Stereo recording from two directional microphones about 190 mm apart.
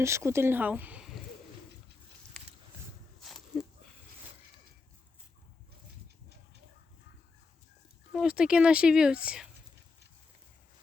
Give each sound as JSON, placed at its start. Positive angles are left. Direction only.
{"t": 0.0, "sound": "speech", "side_deg": -15}
{"t": 2.3, "sound": "a sound", "side_deg": 5}
{"t": 8.1, "sound": "speech", "side_deg": -5}